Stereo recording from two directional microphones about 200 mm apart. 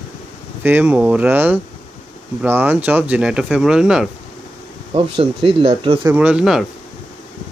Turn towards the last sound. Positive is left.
turn(degrees=0)  # may be behind; listen again after turning